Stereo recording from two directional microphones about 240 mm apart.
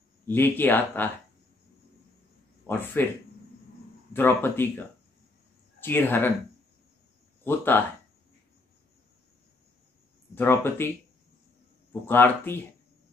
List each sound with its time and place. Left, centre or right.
0.3 s speech: centre
2.6 s a sound: centre
4.1 s speech: centre
7.4 s speech: centre
10.3 s speech: centre
11.9 s speech: centre